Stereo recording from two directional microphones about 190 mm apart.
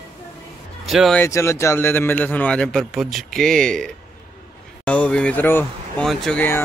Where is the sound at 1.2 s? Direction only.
15° left (ahead or behind).